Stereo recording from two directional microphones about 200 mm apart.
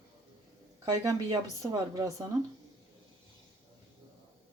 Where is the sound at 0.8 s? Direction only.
20° right (ahead or behind).